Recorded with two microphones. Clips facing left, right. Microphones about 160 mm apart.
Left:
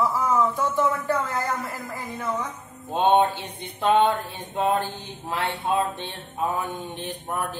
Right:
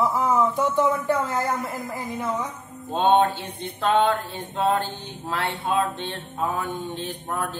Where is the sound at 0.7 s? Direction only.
15° right (ahead or behind).